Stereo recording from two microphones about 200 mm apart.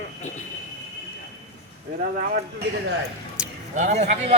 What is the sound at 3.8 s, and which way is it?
Speech, 35° right (ahead or behind).